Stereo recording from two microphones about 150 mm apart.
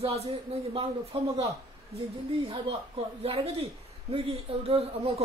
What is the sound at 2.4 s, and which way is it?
A woman's voice, 40° right (ahead or behind).